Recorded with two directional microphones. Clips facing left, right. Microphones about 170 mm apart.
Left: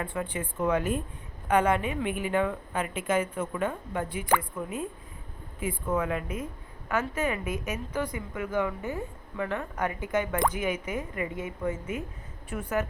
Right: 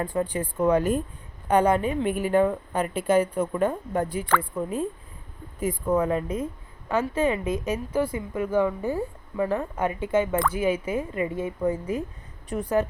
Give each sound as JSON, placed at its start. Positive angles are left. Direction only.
{"t": 0.0, "sound": "a woman's voice", "side_deg": -35}